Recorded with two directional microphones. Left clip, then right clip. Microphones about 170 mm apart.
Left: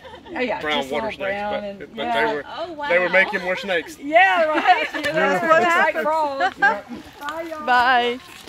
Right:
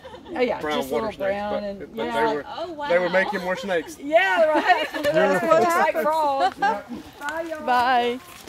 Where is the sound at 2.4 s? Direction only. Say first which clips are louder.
Left 2 dB; 10° left (ahead or behind).